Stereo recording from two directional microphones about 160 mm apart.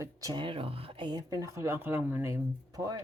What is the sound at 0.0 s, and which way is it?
Speech, 20° right (ahead or behind).